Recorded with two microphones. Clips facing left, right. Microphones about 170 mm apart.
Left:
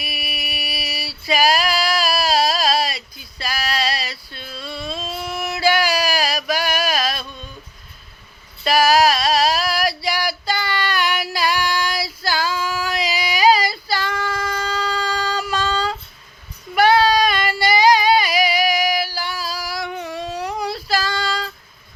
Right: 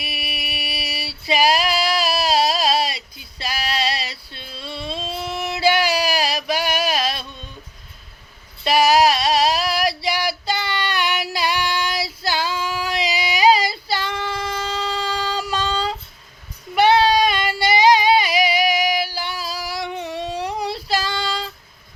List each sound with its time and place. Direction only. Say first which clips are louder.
0.1 s female singing: even; 25° right (ahead or behind)
4.3 s a sound: left 1 dB; 25° right (ahead or behind)
8.6 s female singing: even; 25° right (ahead or behind)